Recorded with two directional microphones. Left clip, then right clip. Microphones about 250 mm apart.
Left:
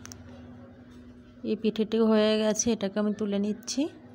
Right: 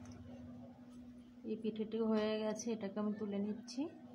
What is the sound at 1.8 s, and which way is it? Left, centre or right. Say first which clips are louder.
A woman's voice: left 14 dB; left.